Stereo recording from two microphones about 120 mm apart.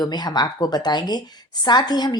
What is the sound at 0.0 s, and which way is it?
A woman's voice, 35° left (ahead or behind).